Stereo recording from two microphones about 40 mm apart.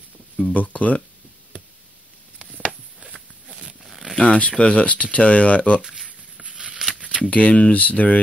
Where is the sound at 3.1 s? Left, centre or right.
Right.